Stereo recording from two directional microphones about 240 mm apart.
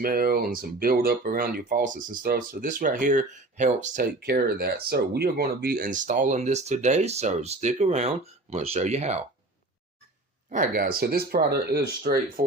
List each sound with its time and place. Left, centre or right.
0.0 s speech: right
10.5 s speech: right